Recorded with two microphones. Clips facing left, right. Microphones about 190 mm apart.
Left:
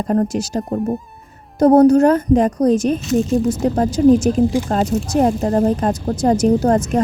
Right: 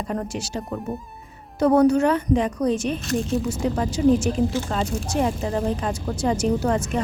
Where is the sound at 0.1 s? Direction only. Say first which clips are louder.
Left 13 dB; 40° left (ahead or behind).